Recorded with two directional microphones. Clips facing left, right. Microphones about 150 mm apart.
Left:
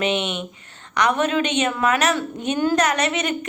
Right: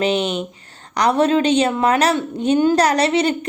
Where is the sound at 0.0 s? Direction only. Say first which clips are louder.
Right 4 dB; 35° right (ahead or behind).